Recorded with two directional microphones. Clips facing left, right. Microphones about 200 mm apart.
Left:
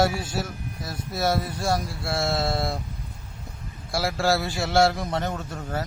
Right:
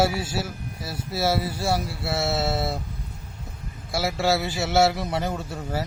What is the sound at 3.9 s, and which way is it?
Speech, centre (ahead or behind).